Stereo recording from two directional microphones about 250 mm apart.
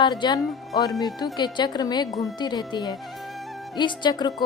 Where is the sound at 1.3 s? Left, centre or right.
Centre.